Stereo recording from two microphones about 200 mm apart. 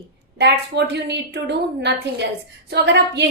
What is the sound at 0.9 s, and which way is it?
A woman's voice, 55° right (ahead or behind).